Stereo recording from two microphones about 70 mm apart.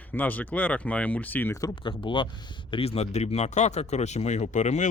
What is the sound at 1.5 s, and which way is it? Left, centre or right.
Speech, left.